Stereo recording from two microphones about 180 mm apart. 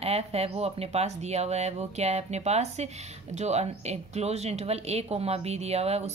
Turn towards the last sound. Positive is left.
turn(degrees=-35)  # may be behind; listen again after turning